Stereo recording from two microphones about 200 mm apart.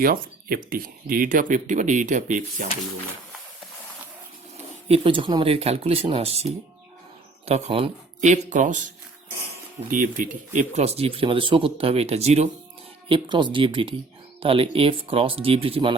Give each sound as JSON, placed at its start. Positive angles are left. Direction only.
{"t": 0.0, "sound": "speech", "side_deg": -45}
{"t": 4.9, "sound": "speech", "side_deg": -25}
{"t": 9.9, "sound": "speech", "side_deg": -40}